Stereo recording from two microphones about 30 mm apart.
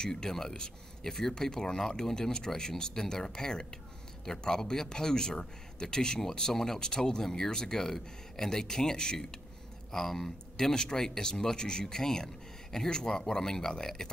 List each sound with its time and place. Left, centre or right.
0.0 s speech: centre
6.5 s speech: centre
6.8 s speech: left
9.8 s speech: centre